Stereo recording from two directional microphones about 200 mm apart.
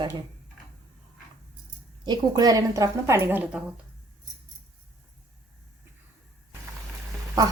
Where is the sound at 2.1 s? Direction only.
20° right (ahead or behind).